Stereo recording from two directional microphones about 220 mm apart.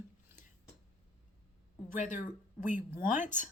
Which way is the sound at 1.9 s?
35° left (ahead or behind).